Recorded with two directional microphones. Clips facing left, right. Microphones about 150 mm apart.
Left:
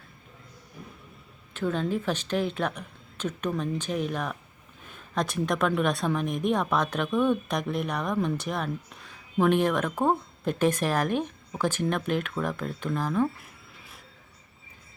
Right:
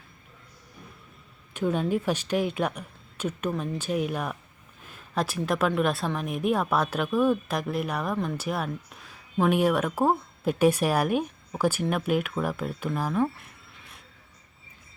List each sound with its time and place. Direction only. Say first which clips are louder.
1.5 s speech: right 2 dB; 15° right (ahead or behind)